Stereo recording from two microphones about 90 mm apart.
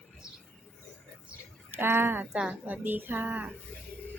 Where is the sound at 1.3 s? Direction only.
25° right (ahead or behind).